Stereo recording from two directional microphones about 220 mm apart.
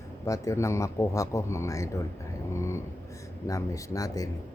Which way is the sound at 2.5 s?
10° left (ahead or behind).